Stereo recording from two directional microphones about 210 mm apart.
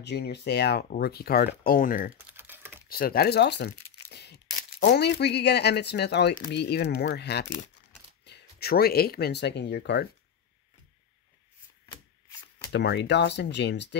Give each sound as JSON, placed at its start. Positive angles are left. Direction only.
{"t": 0.0, "sound": "speech", "side_deg": 50}
{"t": 2.1, "sound": "typing", "side_deg": -10}
{"t": 2.9, "sound": "tearing", "side_deg": 45}
{"t": 4.6, "sound": "a sound", "side_deg": 40}
{"t": 4.9, "sound": "speech", "side_deg": 55}
{"t": 11.8, "sound": "rub", "side_deg": 15}
{"t": 12.7, "sound": "speech", "side_deg": 55}